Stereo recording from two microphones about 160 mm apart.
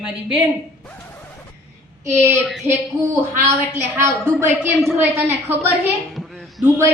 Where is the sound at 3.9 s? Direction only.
15° right (ahead or behind).